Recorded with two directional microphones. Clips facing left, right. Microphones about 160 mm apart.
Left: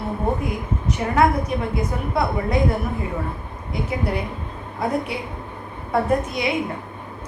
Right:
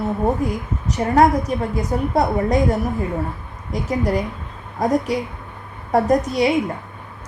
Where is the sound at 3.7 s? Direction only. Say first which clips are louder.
Right 4 dB; 40° right (ahead or behind).